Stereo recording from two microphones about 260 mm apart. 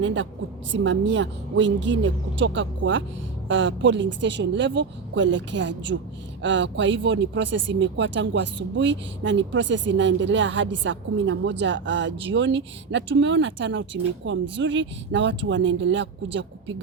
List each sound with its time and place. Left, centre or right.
0.0 s speech: right